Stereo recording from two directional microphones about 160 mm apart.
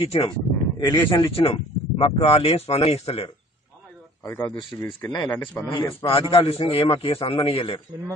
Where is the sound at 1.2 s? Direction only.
35° left (ahead or behind).